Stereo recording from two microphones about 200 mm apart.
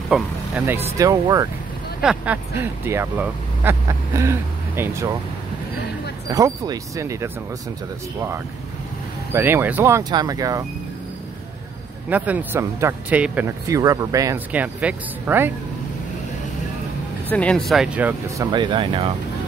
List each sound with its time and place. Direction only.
0.1 s speech: 5° right (ahead or behind)
2.0 s speech: 5° right (ahead or behind)
6.3 s speech: 20° right (ahead or behind)
9.3 s speech: 10° right (ahead or behind)
12.1 s speech: 10° right (ahead or behind)
17.3 s speech: 5° left (ahead or behind)
18.5 s speech: 25° right (ahead or behind)